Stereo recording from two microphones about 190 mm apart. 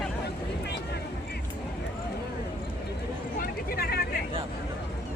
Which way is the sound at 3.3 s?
50° left (ahead or behind).